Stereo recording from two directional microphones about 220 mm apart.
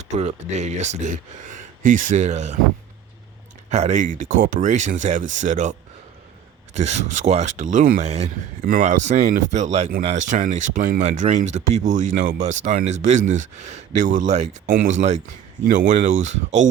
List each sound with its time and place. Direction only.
0.0 s speech: 30° right (ahead or behind)
3.7 s speech: 30° right (ahead or behind)
6.7 s speech: 30° right (ahead or behind)